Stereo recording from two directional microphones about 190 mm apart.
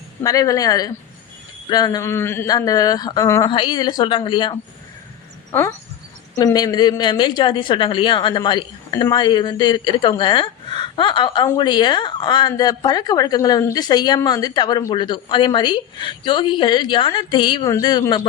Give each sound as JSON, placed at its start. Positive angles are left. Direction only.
{"t": 0.2, "sound": "a woman's voice", "side_deg": 20}
{"t": 5.5, "sound": "a woman's voice", "side_deg": 15}